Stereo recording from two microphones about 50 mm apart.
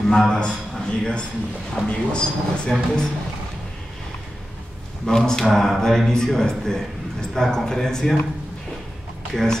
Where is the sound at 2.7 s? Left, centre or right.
Centre.